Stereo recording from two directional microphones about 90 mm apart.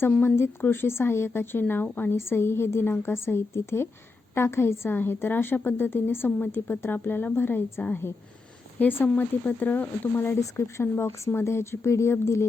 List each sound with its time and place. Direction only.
0.2 s speech: 25° left (ahead or behind)